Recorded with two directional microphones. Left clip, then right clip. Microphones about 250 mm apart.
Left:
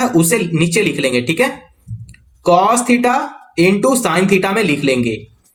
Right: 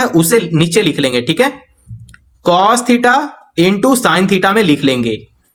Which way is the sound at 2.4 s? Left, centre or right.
Right.